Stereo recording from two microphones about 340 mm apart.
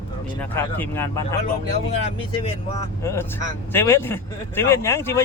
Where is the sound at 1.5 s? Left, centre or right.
Centre.